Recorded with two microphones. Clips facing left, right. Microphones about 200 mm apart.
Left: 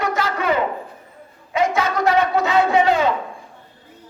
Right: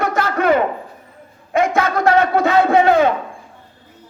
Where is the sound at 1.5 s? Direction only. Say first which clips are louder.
Right 3 dB; 50° right (ahead or behind).